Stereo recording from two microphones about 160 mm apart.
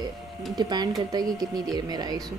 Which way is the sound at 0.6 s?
25° right (ahead or behind).